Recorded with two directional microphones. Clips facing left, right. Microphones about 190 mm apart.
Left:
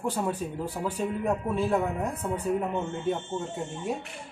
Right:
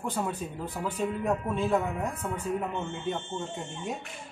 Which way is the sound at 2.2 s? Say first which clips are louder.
Left 3 dB; 35° left (ahead or behind).